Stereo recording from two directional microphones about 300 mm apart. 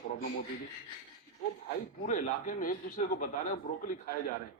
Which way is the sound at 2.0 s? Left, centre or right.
Left.